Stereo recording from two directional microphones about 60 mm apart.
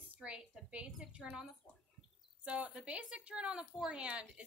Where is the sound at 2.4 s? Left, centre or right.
Right.